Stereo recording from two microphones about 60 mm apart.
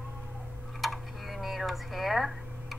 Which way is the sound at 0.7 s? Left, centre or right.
Centre.